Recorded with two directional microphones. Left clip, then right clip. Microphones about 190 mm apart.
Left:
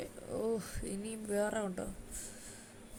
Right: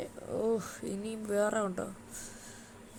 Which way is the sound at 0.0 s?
5° right (ahead or behind).